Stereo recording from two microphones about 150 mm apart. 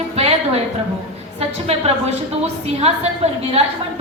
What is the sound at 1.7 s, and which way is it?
A woman's voice, 40° right (ahead or behind).